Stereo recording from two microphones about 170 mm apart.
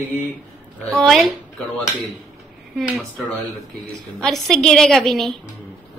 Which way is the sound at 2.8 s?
Centre (ahead or behind).